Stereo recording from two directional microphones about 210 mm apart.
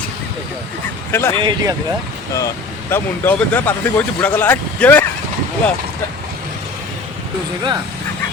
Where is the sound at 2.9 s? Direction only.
10° left (ahead or behind).